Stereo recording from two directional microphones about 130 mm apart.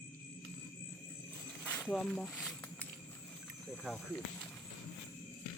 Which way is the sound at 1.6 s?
10° left (ahead or behind).